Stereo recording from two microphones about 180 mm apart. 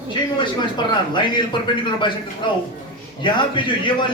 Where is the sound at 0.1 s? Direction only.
25° left (ahead or behind).